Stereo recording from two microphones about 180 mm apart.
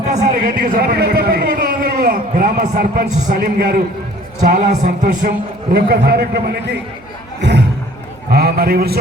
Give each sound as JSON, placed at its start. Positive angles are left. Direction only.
{"t": 0.0, "sound": "a man's voice", "side_deg": -45}
{"t": 4.4, "sound": "a man's voice", "side_deg": -45}
{"t": 5.7, "sound": "a man's voice", "side_deg": -60}
{"t": 8.3, "sound": "a man's voice", "side_deg": -60}